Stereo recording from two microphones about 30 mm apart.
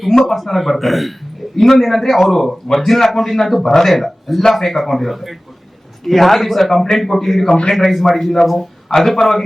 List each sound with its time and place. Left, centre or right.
0.3 s a man's voice: centre
3.6 s a man's voice: centre
3.9 s a man's voice: centre
7.4 s a man's voice: left
7.7 s a man's voice: centre